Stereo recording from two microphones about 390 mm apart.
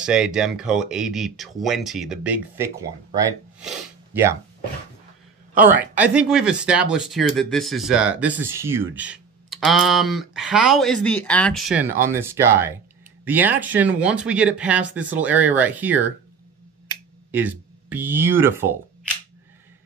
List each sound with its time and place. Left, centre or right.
0.0 s speech: centre
5.5 s speech: right
5.9 s speech: centre
17.3 s speech: centre